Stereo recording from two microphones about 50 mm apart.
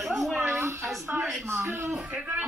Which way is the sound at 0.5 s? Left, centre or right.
Right.